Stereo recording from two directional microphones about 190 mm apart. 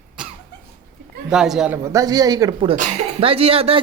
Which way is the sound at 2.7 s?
40° right (ahead or behind).